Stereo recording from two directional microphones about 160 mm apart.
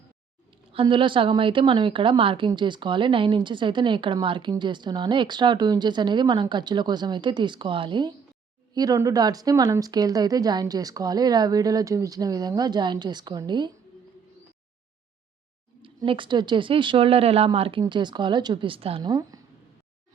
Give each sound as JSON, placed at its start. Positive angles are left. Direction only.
{"t": 0.7, "sound": "a woman's voice", "side_deg": -35}
{"t": 15.8, "sound": "speech", "side_deg": -30}